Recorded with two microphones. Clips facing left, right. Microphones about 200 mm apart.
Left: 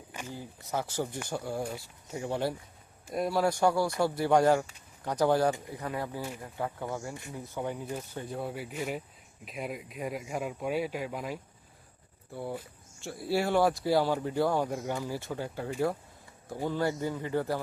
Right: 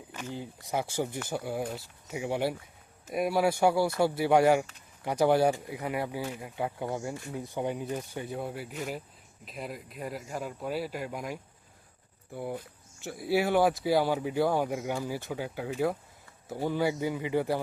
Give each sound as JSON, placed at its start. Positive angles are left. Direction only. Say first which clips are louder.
{"t": 0.1, "sound": "a sound", "louder": "right 2 dB", "side_deg": 10}
{"t": 0.3, "sound": "speech", "louder": "right 2 dB", "side_deg": -15}
{"t": 1.3, "sound": "speech", "louder": "right 1 dB", "side_deg": -5}
{"t": 8.4, "sound": "speech", "louder": "left 1 dB", "side_deg": 5}
{"t": 13.1, "sound": "speech", "louder": "right 2 dB", "side_deg": 0}